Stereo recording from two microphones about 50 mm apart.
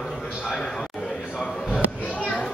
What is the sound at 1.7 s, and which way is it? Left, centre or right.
Children playing, left.